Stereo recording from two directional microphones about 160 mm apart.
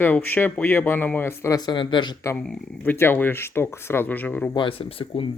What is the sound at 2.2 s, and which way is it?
Speech, 20° left (ahead or behind).